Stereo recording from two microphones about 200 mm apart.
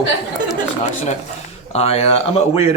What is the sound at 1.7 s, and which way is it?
Speech, 30° left (ahead or behind).